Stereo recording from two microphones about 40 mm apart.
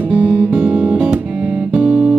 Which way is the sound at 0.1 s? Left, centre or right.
Right.